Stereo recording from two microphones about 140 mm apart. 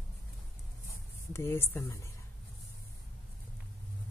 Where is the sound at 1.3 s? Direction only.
15° left (ahead or behind).